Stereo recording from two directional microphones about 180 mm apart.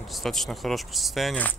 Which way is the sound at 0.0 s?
Centre (ahead or behind).